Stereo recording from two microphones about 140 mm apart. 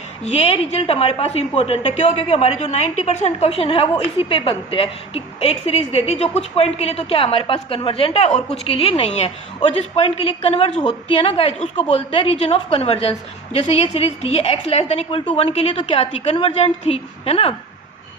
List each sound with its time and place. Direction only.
0.2 s a woman's voice: 50° left (ahead or behind)